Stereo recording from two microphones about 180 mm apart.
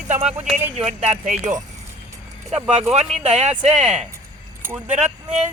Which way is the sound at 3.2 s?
35° right (ahead or behind).